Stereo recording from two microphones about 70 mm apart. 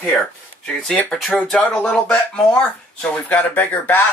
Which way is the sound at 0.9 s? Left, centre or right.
Centre.